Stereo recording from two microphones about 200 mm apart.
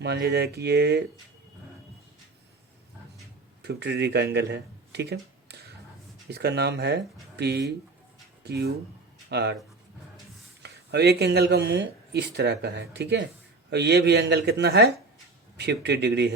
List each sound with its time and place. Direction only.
0.0 s speech: 55° right (ahead or behind)
3.6 s speech: 55° right (ahead or behind)
10.6 s speech: 55° right (ahead or behind)